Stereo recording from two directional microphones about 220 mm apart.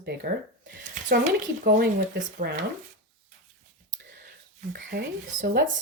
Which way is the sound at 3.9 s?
45° right (ahead or behind).